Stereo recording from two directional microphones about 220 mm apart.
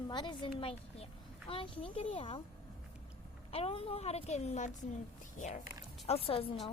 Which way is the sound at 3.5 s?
25° left (ahead or behind).